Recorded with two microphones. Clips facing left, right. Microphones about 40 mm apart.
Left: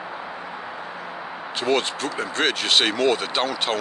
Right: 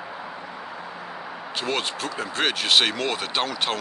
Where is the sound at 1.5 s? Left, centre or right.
Centre.